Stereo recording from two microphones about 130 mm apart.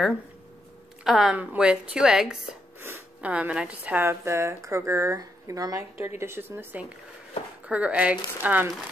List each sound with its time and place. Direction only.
1.0 s a woman's voice: 5° right (ahead or behind)